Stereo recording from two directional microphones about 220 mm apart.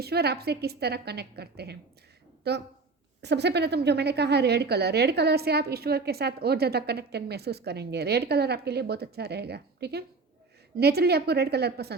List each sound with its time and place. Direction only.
0.0 s a woman's voice: 45° right (ahead or behind)